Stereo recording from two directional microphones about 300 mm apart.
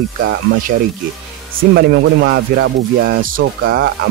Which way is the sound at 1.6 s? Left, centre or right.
Right.